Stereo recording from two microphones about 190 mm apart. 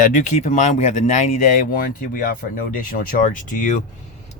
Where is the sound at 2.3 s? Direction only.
50° left (ahead or behind).